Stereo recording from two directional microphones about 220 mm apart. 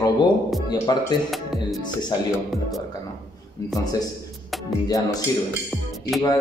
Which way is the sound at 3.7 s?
15° left (ahead or behind).